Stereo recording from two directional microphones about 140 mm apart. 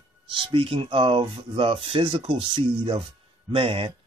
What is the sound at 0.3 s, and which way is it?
Speech, 35° right (ahead or behind).